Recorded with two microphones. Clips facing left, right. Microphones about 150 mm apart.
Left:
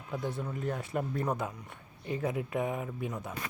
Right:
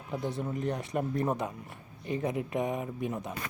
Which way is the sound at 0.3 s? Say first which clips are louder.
Right 3 dB; 20° right (ahead or behind).